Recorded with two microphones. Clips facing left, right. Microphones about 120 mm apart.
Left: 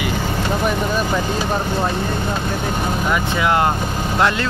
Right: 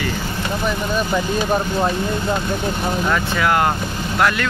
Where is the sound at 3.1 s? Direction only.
15° left (ahead or behind).